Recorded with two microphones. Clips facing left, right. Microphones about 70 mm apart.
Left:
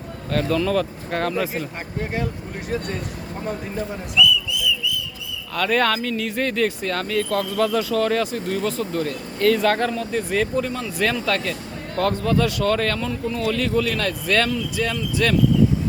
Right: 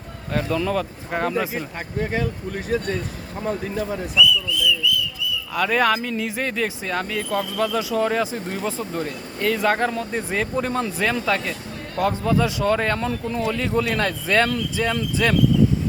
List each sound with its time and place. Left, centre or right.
0.3 s speech: centre
4.8 s a sound: left
5.5 s a man's voice: centre
10.6 s speech: right
11.0 s a man's voice: centre